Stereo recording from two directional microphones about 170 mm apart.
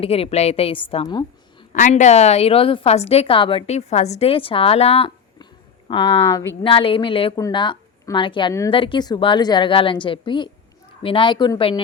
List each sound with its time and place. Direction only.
0.0 s a woman's voice: 35° left (ahead or behind)
1.7 s a woman's voice: 45° left (ahead or behind); by 11.8 s 25° left (ahead or behind)